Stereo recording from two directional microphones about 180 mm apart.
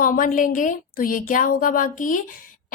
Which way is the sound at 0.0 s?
50° left (ahead or behind).